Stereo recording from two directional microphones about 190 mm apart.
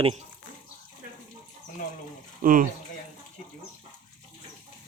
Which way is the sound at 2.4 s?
45° right (ahead or behind).